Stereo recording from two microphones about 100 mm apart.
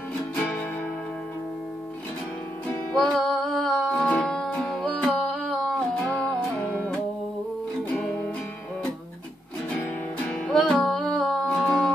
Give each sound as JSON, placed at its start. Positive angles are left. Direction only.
{"t": 3.1, "sound": "music", "side_deg": 0}
{"t": 3.9, "sound": "music", "side_deg": 10}
{"t": 10.3, "sound": "music", "side_deg": 5}